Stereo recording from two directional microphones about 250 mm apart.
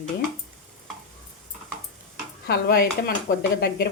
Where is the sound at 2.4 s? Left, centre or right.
Left.